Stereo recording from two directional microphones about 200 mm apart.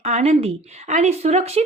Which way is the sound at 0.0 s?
35° right (ahead or behind).